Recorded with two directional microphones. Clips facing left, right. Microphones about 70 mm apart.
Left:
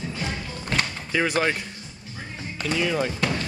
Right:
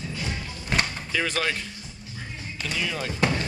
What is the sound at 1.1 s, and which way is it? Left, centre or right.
Speech, centre.